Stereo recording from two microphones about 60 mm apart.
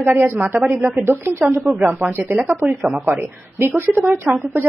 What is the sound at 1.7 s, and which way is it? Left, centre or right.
Speech, right.